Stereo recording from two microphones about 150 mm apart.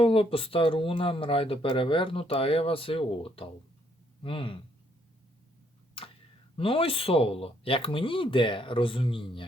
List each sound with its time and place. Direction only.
0.0 s speech: 40° left (ahead or behind)
6.6 s speech: 40° left (ahead or behind)